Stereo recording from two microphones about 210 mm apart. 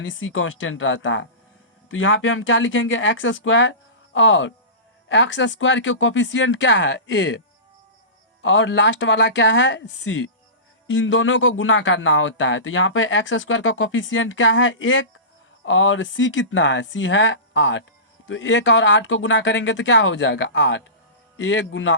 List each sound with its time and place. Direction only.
0.0 s speech: 65° left (ahead or behind)